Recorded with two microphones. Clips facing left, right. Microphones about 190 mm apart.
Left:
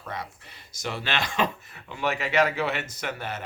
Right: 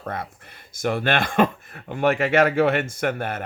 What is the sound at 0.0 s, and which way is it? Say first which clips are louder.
Speech: right 5 dB; 55° right (ahead or behind).